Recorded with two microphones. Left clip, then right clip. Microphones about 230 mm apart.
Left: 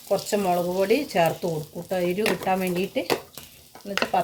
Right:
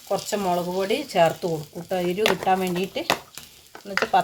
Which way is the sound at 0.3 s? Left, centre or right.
Right.